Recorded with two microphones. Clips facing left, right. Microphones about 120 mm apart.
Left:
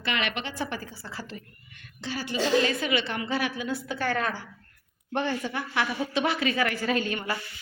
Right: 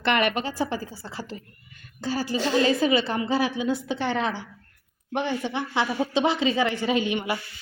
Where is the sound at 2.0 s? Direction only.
40° right (ahead or behind); by 7.3 s 15° right (ahead or behind).